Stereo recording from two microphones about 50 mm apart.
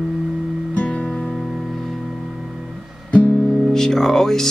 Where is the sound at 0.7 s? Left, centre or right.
Left.